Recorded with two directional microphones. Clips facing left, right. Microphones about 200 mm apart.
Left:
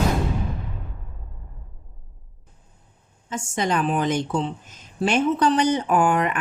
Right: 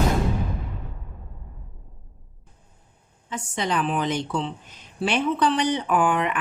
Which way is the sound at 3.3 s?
45° left (ahead or behind).